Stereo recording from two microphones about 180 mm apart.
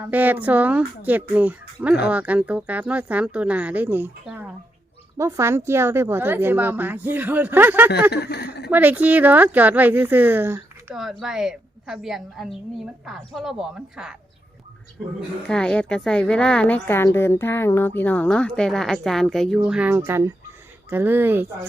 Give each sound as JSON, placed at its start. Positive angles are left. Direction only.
{"t": 0.0, "sound": "a woman's voice", "side_deg": -10}
{"t": 8.1, "sound": "speech", "side_deg": 65}
{"t": 8.7, "sound": "a woman's voice", "side_deg": -10}
{"t": 15.4, "sound": "a woman's voice", "side_deg": 5}